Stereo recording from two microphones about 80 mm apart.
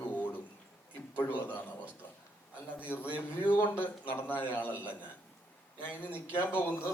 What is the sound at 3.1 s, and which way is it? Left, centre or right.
A man's voice, left.